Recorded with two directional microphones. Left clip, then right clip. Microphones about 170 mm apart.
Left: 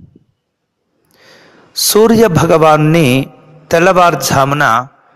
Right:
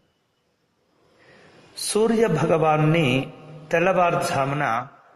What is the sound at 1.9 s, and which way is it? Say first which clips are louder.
A man's voice: left 11 dB; 50° left (ahead or behind).